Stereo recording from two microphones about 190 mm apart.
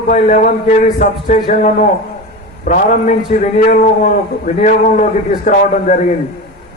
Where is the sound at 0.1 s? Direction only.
35° left (ahead or behind).